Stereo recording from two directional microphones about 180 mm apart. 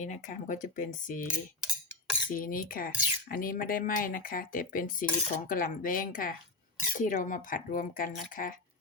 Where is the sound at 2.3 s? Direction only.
50° left (ahead or behind).